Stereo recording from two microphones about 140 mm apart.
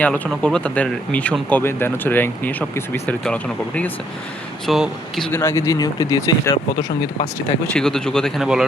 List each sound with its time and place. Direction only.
0.4 s speech: 10° left (ahead or behind)
5.3 s speech: 20° left (ahead or behind)
7.7 s speech: 5° left (ahead or behind)